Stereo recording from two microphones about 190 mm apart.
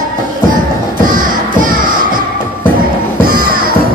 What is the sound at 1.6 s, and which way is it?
Music, 45° right (ahead or behind).